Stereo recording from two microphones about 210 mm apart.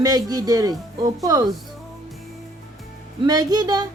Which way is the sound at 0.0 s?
15° right (ahead or behind).